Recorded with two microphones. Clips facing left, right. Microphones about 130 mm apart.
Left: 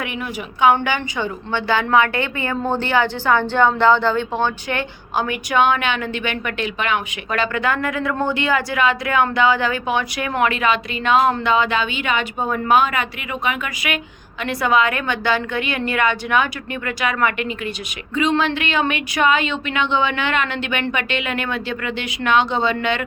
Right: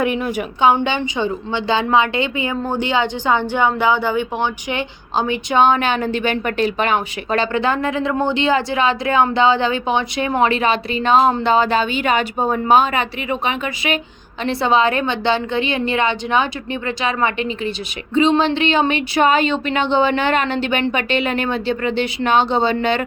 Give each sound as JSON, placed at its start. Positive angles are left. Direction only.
{"t": 0.6, "sound": "a woman's voice", "side_deg": -25}